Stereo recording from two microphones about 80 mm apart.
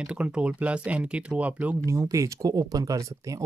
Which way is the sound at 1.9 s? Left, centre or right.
Right.